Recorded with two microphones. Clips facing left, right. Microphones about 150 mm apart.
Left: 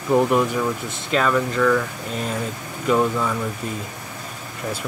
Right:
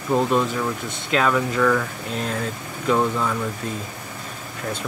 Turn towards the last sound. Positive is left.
turn(degrees=0)  # may be behind; listen again after turning